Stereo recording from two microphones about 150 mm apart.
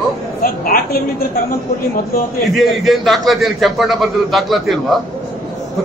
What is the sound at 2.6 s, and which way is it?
A man's voice, centre (ahead or behind).